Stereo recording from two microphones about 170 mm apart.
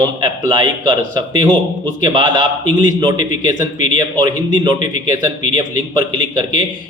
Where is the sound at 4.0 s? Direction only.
25° right (ahead or behind).